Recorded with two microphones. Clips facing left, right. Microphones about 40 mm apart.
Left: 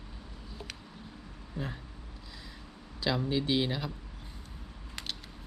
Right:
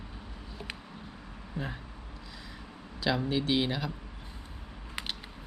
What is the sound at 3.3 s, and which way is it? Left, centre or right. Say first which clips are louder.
Speech: left 1 dB; centre.